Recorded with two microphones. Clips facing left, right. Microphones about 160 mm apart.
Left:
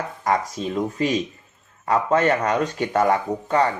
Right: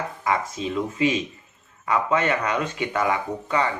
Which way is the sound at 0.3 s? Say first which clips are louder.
Left 2 dB; 40° left (ahead or behind).